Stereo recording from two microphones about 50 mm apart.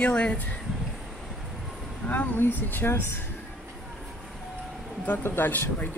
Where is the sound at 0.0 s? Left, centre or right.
Left.